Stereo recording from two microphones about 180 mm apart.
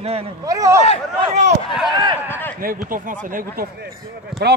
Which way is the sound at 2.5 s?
50° right (ahead or behind).